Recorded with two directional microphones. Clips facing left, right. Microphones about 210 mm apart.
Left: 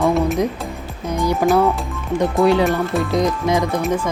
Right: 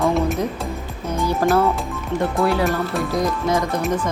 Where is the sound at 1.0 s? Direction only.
15° left (ahead or behind).